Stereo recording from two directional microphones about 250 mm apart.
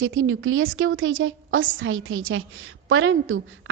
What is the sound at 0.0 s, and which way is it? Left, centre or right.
A woman's voice, right.